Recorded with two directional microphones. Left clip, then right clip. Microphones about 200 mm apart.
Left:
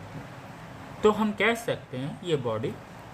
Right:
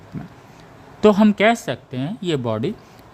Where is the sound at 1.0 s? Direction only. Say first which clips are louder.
Right 9 dB; 60° right (ahead or behind).